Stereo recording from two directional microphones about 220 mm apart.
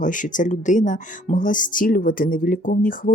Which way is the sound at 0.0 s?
35° left (ahead or behind).